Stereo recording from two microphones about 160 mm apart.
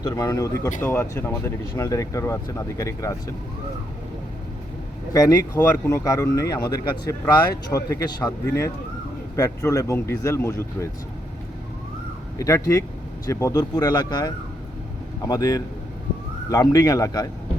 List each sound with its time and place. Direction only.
0.0 s speech: 20° left (ahead or behind)
5.1 s speech: 20° left (ahead or behind)
12.4 s speech: 20° left (ahead or behind)